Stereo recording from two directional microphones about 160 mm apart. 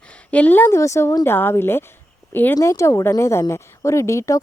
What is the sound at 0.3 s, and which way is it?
A woman's voice, 10° left (ahead or behind).